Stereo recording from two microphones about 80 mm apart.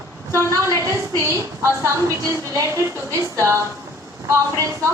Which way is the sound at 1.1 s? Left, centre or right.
Right.